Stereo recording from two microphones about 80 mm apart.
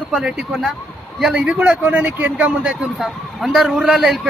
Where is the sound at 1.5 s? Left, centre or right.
Centre.